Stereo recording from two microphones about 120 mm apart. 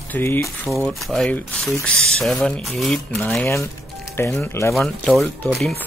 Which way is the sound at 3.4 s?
25° left (ahead or behind).